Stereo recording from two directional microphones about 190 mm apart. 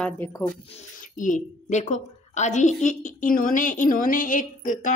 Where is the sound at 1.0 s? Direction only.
45° left (ahead or behind).